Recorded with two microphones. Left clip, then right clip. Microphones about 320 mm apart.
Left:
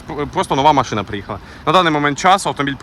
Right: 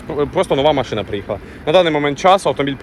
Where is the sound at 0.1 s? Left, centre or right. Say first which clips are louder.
Right 2 dB; centre.